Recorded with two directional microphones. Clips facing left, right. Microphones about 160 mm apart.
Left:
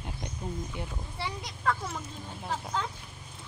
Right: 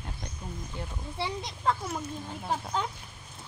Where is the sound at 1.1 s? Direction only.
25° right (ahead or behind).